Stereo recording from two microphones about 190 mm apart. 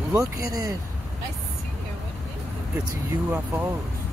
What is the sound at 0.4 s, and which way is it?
Speech, 20° right (ahead or behind).